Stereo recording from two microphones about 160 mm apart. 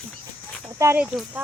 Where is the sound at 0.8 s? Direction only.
15° right (ahead or behind).